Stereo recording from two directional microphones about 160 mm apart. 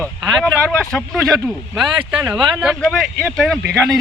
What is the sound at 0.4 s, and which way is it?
Speech, centre (ahead or behind).